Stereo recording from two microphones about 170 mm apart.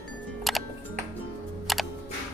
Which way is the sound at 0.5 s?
Centre (ahead or behind).